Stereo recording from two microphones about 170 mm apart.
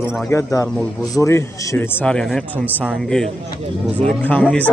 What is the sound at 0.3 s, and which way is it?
A man's voice, 20° left (ahead or behind).